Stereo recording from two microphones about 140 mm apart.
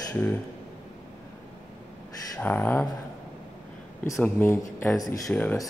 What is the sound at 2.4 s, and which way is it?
Speech, 10° left (ahead or behind).